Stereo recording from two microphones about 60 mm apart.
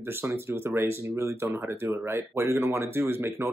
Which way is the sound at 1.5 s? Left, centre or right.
Right.